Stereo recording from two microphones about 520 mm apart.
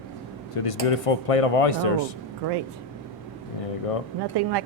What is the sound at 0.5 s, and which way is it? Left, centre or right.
Speech, left.